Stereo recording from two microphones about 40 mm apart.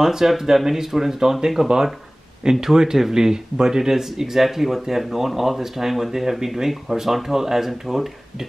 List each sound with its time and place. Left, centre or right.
0.0 s speech: centre